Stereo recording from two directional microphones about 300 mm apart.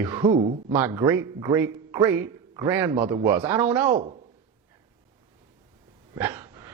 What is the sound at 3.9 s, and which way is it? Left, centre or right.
Speech, right.